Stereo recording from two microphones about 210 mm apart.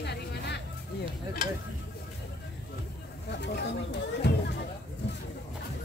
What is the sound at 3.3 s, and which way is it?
Speech, 50° left (ahead or behind).